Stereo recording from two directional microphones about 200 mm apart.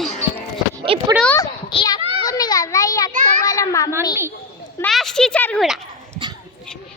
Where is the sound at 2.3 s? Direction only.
20° left (ahead or behind).